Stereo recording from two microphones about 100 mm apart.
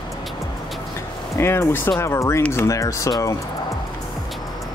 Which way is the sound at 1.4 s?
25° left (ahead or behind).